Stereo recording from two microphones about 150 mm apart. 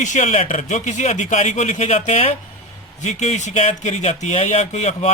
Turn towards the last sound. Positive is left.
turn(degrees=50)  # may be behind; listen again after turning